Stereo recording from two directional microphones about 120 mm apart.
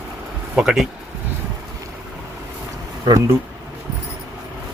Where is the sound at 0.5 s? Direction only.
5° right (ahead or behind).